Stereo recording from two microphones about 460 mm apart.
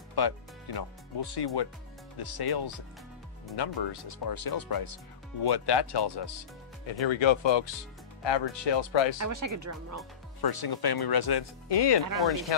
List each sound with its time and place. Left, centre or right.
0.1 s speech: left
6.9 s speech: left
9.2 s speech: right
10.4 s speech: left